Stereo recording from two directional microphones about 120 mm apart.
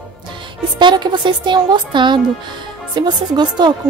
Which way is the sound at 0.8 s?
35° right (ahead or behind).